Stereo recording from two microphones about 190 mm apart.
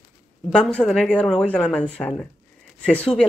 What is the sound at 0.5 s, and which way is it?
Speech, 5° left (ahead or behind).